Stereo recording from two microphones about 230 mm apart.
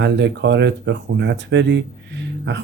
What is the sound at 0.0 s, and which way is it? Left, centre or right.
Speech, right.